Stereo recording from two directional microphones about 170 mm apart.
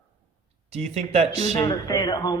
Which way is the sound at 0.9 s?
40° right (ahead or behind).